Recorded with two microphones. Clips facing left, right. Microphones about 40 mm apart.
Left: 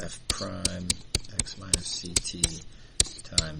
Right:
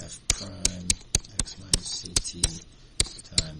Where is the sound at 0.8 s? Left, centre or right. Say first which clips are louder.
Right 1 dB; right.